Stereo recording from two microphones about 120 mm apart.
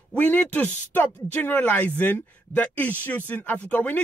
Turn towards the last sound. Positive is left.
turn(degrees=10)  # may be behind; listen again after turning